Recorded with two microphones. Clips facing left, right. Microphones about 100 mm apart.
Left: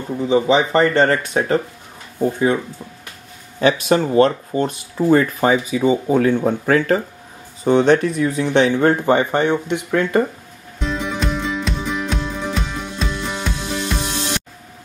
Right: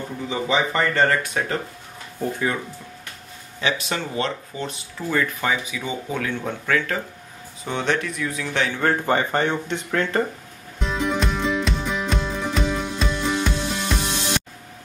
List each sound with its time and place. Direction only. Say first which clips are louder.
0.3 s speech: left 8 dB; 30° left (ahead or behind)
3.6 s speech: left 10 dB; 45° left (ahead or behind)
8.7 s speech: left 6 dB; 20° left (ahead or behind)
10.8 s music: left 1 dB; centre (ahead or behind)